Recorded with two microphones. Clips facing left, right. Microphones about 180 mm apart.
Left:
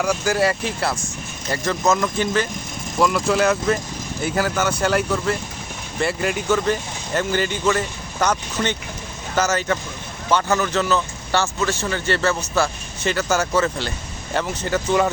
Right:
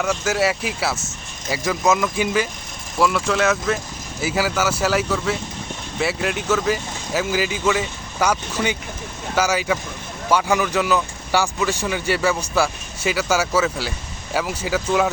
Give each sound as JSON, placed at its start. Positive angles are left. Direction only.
{"t": 0.0, "sound": "speech", "side_deg": 0}